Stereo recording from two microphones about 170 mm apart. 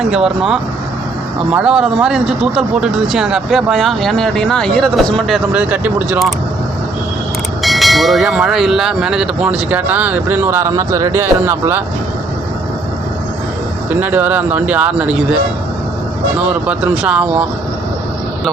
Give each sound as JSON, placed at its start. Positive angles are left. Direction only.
{"t": 0.0, "sound": "speech", "side_deg": -5}
{"t": 7.6, "sound": "speech", "side_deg": 0}
{"t": 13.9, "sound": "speech", "side_deg": -10}
{"t": 16.4, "sound": "speech", "side_deg": -5}